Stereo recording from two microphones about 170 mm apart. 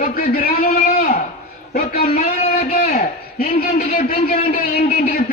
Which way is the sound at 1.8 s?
65° left (ahead or behind).